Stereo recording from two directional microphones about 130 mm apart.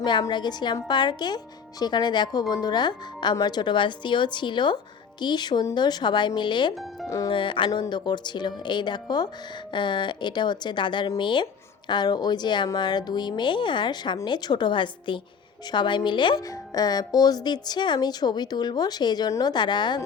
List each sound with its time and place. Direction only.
0.0 s speech: 35° left (ahead or behind)